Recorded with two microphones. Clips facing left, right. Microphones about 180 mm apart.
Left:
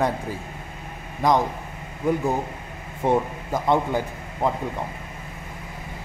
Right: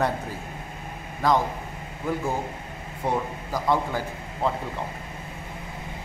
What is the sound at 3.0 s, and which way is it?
A man's voice, 25° left (ahead or behind).